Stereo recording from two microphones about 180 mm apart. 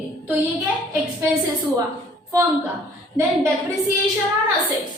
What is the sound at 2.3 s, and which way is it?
Speech, 20° right (ahead or behind).